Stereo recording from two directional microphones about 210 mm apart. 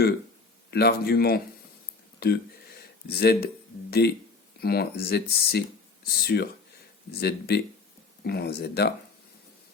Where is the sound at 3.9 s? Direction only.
50° left (ahead or behind).